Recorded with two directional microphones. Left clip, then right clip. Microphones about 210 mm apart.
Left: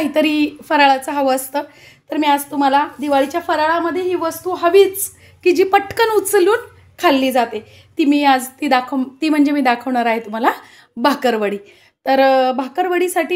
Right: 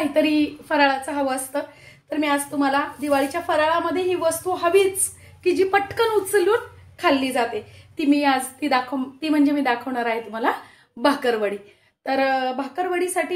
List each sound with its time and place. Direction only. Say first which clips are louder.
0.1 s a woman's voice: left 4 dB; 45° left (ahead or behind)